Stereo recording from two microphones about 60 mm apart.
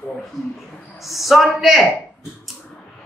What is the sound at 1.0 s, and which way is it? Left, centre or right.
Speech, centre.